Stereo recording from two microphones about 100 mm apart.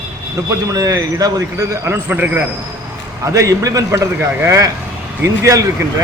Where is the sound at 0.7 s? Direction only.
35° right (ahead or behind); by 2.4 s 15° right (ahead or behind).